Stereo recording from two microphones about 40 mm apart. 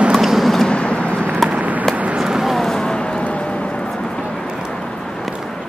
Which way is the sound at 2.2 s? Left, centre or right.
Centre.